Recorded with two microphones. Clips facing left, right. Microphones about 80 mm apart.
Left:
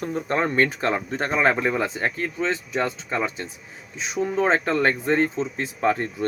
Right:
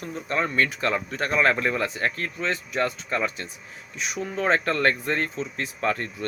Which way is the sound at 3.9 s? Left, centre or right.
Left.